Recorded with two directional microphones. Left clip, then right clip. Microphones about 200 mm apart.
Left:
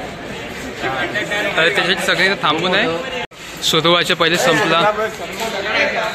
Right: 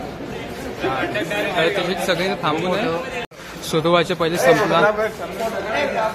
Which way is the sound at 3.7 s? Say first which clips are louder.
Left 3 dB; centre (ahead or behind).